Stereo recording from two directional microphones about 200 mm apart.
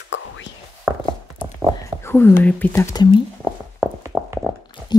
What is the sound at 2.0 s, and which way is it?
Speech, 10° left (ahead or behind).